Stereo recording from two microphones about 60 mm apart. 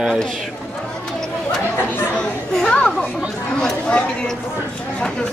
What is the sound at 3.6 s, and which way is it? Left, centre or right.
Speech, centre.